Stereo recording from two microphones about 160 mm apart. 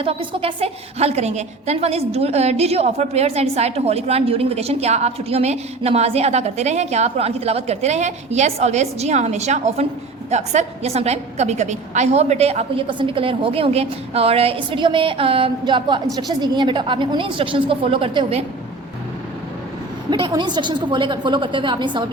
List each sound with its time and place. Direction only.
0.0 s a woman's voice: 35° right (ahead or behind)
20.1 s a woman's voice: 30° right (ahead or behind)